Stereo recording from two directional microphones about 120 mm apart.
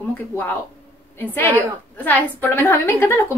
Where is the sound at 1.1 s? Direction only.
20° left (ahead or behind).